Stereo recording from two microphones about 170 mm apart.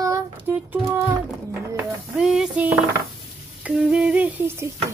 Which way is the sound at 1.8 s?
5° right (ahead or behind).